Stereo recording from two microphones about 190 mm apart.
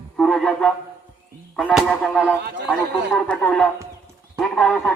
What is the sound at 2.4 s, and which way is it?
Speech, 65° right (ahead or behind).